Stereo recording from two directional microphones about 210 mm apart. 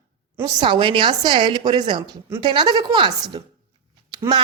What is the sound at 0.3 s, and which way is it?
A woman's voice, 20° right (ahead or behind).